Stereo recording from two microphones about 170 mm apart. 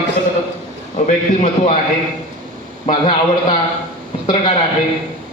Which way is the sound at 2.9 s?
30° left (ahead or behind).